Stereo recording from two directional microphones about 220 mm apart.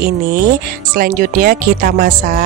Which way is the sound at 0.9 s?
40° right (ahead or behind).